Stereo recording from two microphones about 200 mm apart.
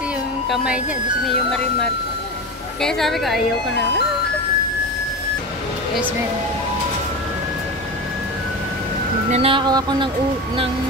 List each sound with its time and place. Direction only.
2.8 s a woman's voice: centre (ahead or behind)
9.3 s speech: 25° right (ahead or behind)